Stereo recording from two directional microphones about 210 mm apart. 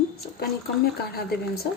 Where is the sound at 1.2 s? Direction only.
50° left (ahead or behind).